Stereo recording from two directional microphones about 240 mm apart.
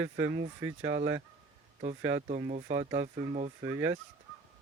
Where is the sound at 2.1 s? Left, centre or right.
Right.